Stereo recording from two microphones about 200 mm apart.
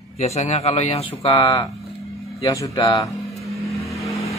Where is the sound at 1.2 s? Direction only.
20° left (ahead or behind).